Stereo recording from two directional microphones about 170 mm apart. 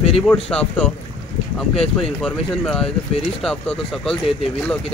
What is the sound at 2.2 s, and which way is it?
Speech, 5° left (ahead or behind).